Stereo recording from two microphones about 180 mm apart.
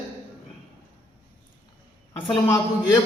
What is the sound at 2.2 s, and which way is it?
Speech, 25° left (ahead or behind).